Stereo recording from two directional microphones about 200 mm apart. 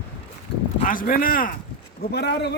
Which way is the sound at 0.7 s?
40° left (ahead or behind).